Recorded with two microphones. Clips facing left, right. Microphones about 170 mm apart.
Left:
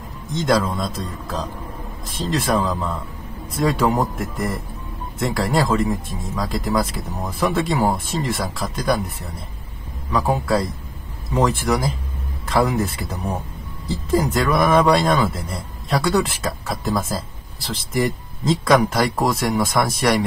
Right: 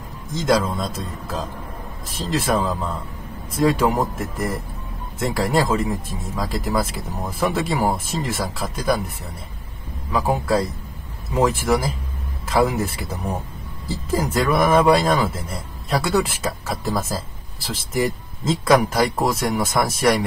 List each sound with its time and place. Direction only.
0.3 s speech: centre (ahead or behind)
10.1 s a man's voice: centre (ahead or behind)
14.1 s speech: centre (ahead or behind)